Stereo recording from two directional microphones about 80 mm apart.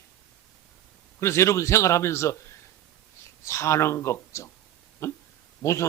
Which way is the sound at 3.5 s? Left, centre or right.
Left.